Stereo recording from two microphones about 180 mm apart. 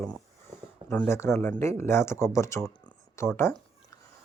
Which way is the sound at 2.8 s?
15° left (ahead or behind).